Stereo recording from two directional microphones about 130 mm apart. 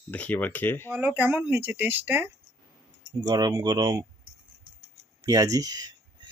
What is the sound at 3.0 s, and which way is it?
Speech, 35° right (ahead or behind).